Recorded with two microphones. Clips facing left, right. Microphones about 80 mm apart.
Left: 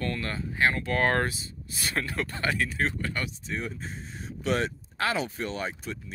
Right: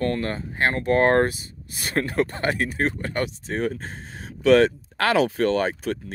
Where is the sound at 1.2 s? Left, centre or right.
Right.